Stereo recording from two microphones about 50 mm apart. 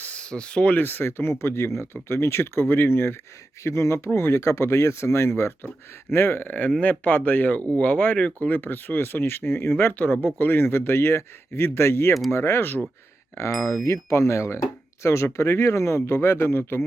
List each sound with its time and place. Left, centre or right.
0.1 s a sound: centre
0.7 s speech: left
3.6 s speech: left
6.1 s speech: left
6.6 s speech: left
6.8 s speech: left
8.4 s speech: left
13.3 s speech: left